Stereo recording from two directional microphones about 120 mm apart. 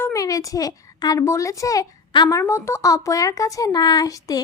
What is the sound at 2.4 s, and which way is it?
A child's voice, 20° left (ahead or behind).